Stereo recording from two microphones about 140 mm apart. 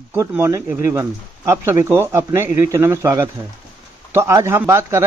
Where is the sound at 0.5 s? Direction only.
15° right (ahead or behind).